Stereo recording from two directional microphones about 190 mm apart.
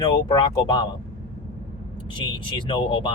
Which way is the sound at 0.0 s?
20° left (ahead or behind).